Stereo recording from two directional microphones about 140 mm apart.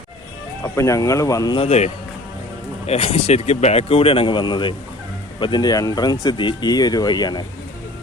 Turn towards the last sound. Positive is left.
turn(degrees=30)  # may be behind; listen again after turning